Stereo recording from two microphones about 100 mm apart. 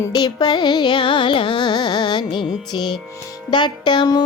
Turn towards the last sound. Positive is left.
turn(degrees=45)  # may be behind; listen again after turning